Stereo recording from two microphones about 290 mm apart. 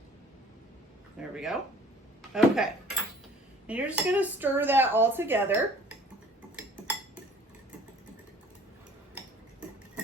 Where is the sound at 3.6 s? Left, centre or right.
Centre.